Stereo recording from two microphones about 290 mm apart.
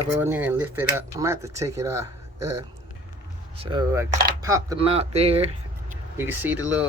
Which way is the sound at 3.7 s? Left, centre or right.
Centre.